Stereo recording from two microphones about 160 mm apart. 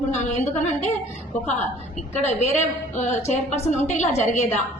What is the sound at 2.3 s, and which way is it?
A woman's voice, 45° left (ahead or behind).